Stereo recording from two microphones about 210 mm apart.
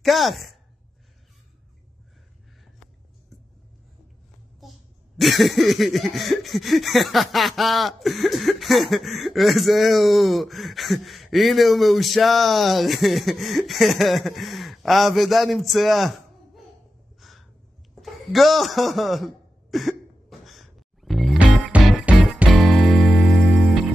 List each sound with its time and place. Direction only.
0.0 s speech: centre (ahead or behind)
4.6 s speech: centre (ahead or behind)
18.0 s a sound: centre (ahead or behind)
21.7 s music: 5° right (ahead or behind)